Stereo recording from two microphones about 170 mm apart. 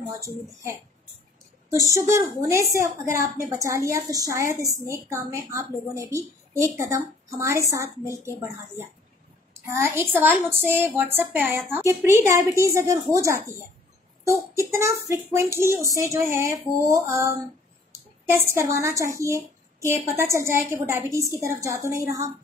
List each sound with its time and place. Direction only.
0.1 s a woman's voice: 20° right (ahead or behind)
2.0 s a woman's voice: 15° right (ahead or behind)
9.7 s a woman's voice: 15° right (ahead or behind)